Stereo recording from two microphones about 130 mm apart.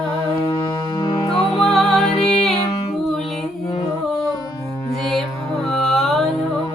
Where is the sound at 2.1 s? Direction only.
50° left (ahead or behind).